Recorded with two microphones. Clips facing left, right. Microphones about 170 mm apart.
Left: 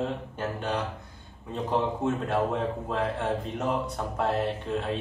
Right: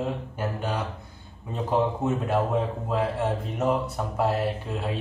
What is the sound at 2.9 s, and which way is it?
A man's voice, 5° right (ahead or behind).